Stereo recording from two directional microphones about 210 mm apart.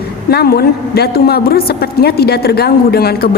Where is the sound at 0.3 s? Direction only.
50° left (ahead or behind).